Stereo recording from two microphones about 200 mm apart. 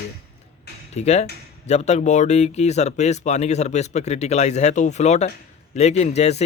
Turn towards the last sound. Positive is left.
turn(degrees=35)  # may be behind; listen again after turning